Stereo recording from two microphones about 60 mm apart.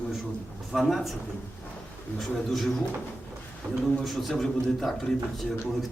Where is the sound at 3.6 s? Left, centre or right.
Right.